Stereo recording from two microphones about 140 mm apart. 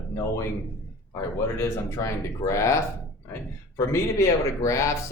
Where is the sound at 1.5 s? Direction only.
20° left (ahead or behind).